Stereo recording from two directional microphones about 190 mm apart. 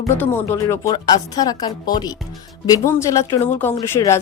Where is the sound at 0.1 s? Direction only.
10° left (ahead or behind).